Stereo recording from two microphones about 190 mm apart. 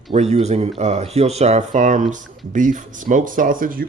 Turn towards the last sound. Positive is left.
turn(degrees=-45)  # may be behind; listen again after turning